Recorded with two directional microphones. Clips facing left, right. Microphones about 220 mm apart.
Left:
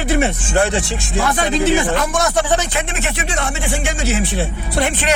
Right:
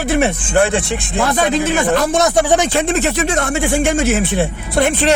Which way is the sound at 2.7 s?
35° right (ahead or behind).